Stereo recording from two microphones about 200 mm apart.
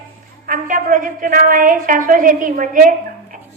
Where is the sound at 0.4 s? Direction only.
40° right (ahead or behind).